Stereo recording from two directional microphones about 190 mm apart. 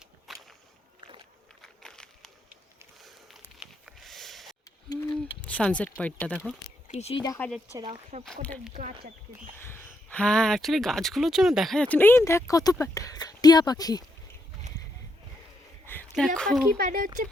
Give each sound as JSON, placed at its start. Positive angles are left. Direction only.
{"t": 0.3, "sound": "whip", "side_deg": 0}
{"t": 1.6, "sound": "a sound", "side_deg": 5}
{"t": 4.9, "sound": "speech", "side_deg": 10}
{"t": 6.8, "sound": "speech", "side_deg": 30}
{"t": 7.3, "sound": "speech", "side_deg": 5}
{"t": 8.7, "sound": "speech", "side_deg": -40}
{"t": 9.6, "sound": "speech", "side_deg": 10}
{"t": 15.9, "sound": "a sound", "side_deg": 5}
{"t": 16.7, "sound": "speech", "side_deg": -50}